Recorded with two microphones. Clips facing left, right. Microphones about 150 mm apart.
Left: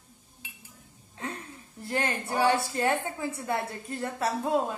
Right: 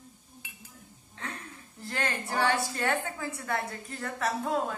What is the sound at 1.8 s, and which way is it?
Speech, 20° left (ahead or behind).